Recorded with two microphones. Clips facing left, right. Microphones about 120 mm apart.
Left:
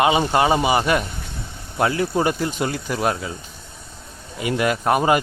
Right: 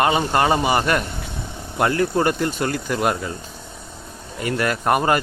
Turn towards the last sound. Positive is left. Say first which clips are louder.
# left 1 dB
turn(degrees=0)  # may be behind; listen again after turning